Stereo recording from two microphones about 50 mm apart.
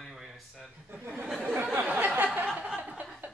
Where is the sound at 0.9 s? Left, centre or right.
Right.